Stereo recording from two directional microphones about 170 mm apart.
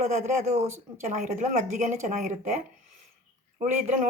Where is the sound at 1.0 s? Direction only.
50° right (ahead or behind).